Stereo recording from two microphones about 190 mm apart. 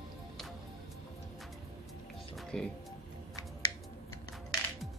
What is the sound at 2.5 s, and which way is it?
Speech, 5° left (ahead or behind).